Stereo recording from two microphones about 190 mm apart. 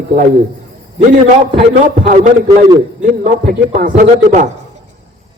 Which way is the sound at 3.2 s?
40° right (ahead or behind).